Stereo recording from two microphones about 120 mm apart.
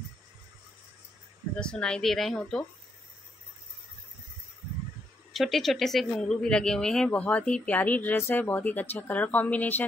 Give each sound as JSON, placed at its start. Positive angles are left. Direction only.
{"t": 1.6, "sound": "speech", "side_deg": 5}
{"t": 5.3, "sound": "speech", "side_deg": 0}